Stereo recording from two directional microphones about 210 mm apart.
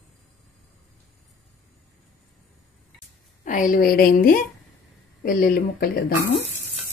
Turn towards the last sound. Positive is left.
turn(degrees=45)  # may be behind; listen again after turning